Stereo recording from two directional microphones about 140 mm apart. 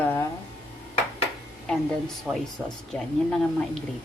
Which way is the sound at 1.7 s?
5° left (ahead or behind).